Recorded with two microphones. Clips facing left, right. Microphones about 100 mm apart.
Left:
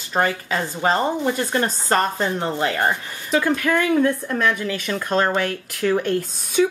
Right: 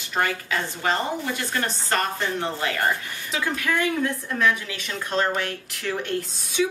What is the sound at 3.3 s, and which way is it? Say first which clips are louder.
Speech: left 7 dB; 50° left (ahead or behind).